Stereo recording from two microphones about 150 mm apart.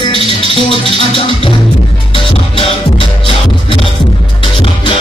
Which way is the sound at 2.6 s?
35° left (ahead or behind).